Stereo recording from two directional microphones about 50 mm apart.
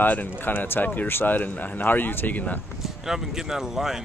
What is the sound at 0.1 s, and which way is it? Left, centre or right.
A man's voice, left.